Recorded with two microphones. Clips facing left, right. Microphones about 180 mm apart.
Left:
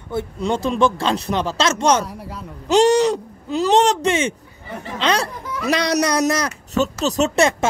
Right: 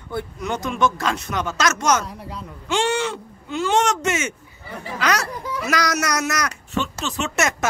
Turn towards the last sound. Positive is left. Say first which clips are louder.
# left 7 dB
turn(degrees=35)  # may be behind; listen again after turning